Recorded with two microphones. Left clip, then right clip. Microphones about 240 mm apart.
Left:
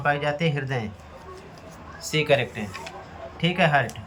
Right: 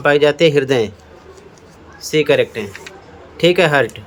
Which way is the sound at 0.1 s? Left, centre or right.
Right.